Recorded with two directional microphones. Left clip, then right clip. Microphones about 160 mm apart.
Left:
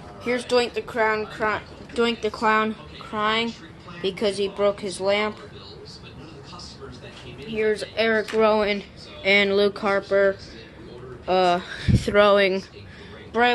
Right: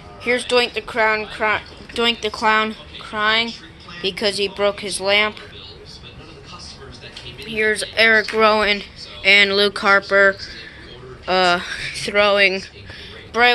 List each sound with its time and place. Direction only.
0.2 s speech: centre (ahead or behind)
3.1 s speech: 5° left (ahead or behind)
7.4 s speech: 5° right (ahead or behind)
9.2 s speech: 20° left (ahead or behind)
11.8 s a man's voice: 25° left (ahead or behind)